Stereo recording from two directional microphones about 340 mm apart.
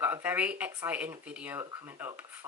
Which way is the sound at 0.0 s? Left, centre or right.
Centre.